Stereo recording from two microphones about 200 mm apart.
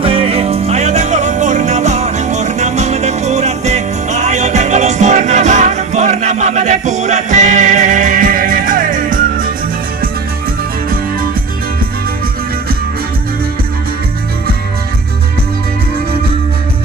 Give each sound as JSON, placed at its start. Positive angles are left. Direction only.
{"t": 0.0, "sound": "music", "side_deg": -30}